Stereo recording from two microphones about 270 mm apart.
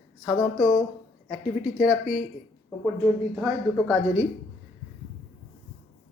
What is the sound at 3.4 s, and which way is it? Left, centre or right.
Speech, centre.